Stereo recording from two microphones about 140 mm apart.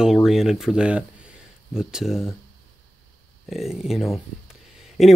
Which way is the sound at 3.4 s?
Centre (ahead or behind).